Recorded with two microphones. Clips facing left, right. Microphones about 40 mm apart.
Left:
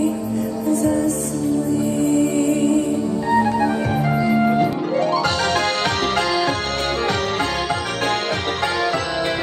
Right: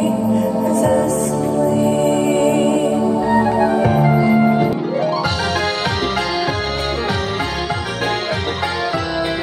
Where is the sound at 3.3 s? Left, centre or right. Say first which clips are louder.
Right 1 dB; centre.